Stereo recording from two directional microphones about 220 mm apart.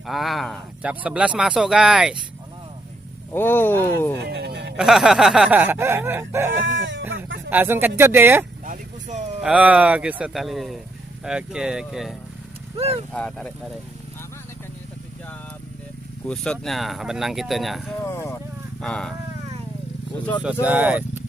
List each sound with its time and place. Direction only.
0.0 s speech: centre (ahead or behind)
3.3 s speech: 10° left (ahead or behind)
4.2 s speech: 50° right (ahead or behind)
4.8 s snicker: 5° right (ahead or behind)
6.7 s speech: 60° right (ahead or behind)
7.5 s snicker: 10° right (ahead or behind)
8.6 s a sound: 35° right (ahead or behind)
9.4 s speech: 5° right (ahead or behind)
12.7 s speech: 30° right (ahead or behind)
13.1 s speech: 5° left (ahead or behind)
16.2 s speech: centre (ahead or behind)
18.0 s speech: 10° left (ahead or behind)
20.4 s snicker: 5° right (ahead or behind)